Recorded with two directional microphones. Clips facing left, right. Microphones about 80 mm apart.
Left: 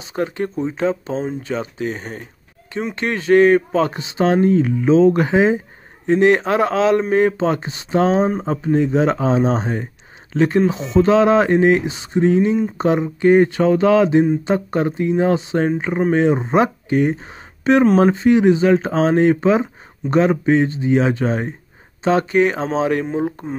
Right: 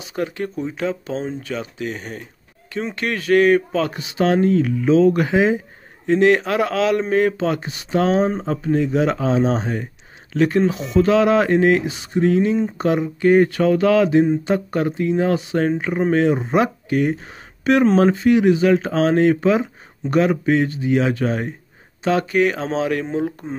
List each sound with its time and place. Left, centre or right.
0.0 s speech: left